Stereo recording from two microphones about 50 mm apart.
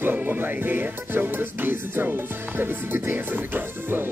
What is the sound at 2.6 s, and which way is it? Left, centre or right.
Speech, right.